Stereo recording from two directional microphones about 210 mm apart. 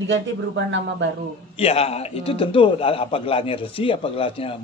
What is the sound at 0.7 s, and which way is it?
Speech, 55° right (ahead or behind).